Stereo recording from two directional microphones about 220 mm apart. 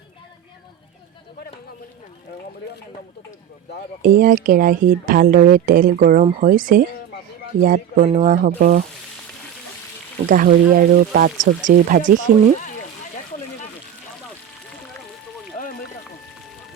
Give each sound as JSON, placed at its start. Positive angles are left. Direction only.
{"t": 4.0, "sound": "speech", "side_deg": -40}
{"t": 10.2, "sound": "speech", "side_deg": -40}